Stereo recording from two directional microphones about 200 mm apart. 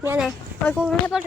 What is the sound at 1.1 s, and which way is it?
Speech, 5° right (ahead or behind).